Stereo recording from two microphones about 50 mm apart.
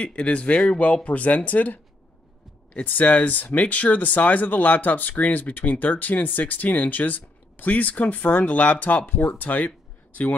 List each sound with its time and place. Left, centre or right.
0.0 s speech: left